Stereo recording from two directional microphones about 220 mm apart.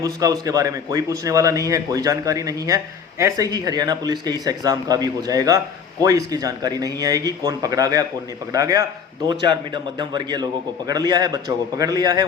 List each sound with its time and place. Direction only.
0.0 s a man's voice: 15° right (ahead or behind)